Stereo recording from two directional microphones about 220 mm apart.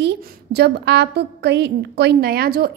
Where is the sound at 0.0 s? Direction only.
50° right (ahead or behind).